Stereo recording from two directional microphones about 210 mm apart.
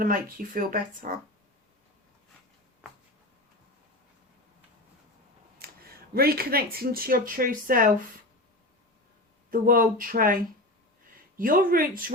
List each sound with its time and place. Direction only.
0.0 s speech: 40° right (ahead or behind)
5.6 s a sound: 45° right (ahead or behind)
6.1 s speech: 45° right (ahead or behind)
9.5 s speech: 40° right (ahead or behind)